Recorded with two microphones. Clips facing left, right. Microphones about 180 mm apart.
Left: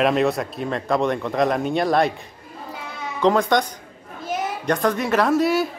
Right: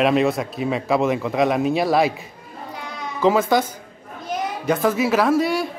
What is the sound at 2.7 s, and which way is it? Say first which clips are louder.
Sheep: right 1 dB; centre (ahead or behind).